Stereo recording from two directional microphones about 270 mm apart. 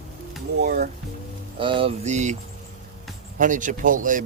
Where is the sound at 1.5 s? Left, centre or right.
Centre.